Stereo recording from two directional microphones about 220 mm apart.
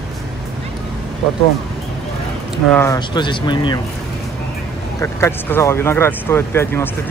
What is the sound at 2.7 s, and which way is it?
Speech, 15° left (ahead or behind).